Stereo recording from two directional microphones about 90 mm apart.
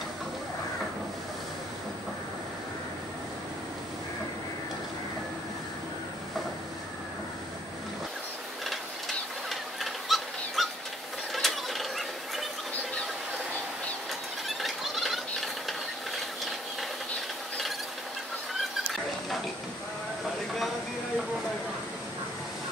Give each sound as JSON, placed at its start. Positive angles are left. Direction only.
{"t": 9.5, "sound": "bird", "side_deg": 0}
{"t": 11.3, "sound": "mechanisms", "side_deg": 0}
{"t": 14.6, "sound": "a sound", "side_deg": 0}